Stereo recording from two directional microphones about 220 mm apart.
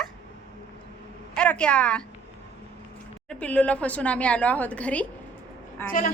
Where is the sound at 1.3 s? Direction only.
5° left (ahead or behind).